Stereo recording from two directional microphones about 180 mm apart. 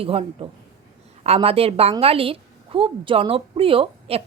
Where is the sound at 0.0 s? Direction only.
30° right (ahead or behind).